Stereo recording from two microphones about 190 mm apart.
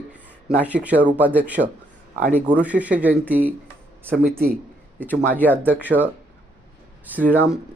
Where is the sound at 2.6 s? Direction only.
5° right (ahead or behind).